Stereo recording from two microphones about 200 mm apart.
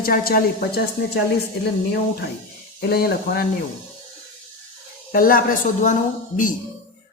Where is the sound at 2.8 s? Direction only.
50° left (ahead or behind).